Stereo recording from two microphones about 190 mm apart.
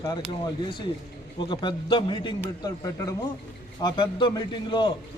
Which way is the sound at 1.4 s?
25° left (ahead or behind).